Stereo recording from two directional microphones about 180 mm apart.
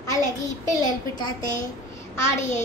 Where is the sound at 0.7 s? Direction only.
25° left (ahead or behind).